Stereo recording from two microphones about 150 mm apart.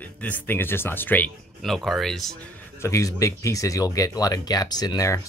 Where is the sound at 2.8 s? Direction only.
20° left (ahead or behind).